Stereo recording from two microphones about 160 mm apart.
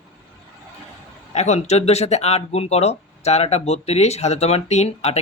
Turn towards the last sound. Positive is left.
turn(degrees=40)  # may be behind; listen again after turning